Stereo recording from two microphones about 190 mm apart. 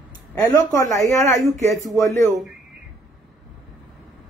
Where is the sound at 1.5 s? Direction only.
40° right (ahead or behind).